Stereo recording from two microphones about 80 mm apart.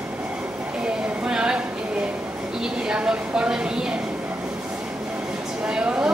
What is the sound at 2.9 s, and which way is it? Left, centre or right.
Speech, centre.